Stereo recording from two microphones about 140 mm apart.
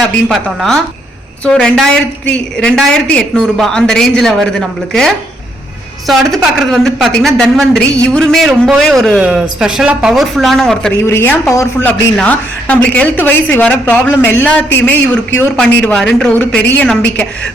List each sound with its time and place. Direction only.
0.0 s a woman's voice: centre (ahead or behind)
11.0 s a woman's voice: 15° left (ahead or behind)
12.1 s a woman's voice: 10° left (ahead or behind)